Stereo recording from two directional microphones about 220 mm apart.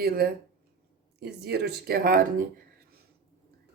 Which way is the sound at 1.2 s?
45° right (ahead or behind).